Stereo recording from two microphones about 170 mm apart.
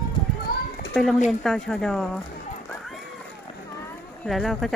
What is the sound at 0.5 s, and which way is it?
Children playing, 65° left (ahead or behind).